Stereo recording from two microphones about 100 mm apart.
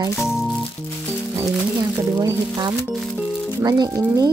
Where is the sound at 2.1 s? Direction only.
40° right (ahead or behind).